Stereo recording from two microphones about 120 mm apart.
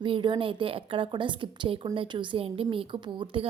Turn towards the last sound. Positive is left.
turn(degrees=-40)  # may be behind; listen again after turning